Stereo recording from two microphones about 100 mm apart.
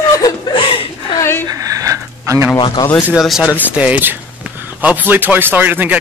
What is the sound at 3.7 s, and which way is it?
A man's voice, 15° right (ahead or behind).